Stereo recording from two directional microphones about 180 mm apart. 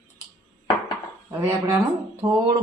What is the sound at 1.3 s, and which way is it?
Speech, 15° right (ahead or behind).